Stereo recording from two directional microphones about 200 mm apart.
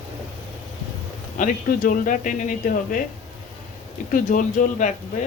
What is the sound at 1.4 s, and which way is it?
Speech, 40° left (ahead or behind).